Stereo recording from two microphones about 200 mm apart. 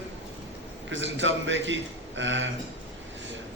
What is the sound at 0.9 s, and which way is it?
Speech, 70° right (ahead or behind).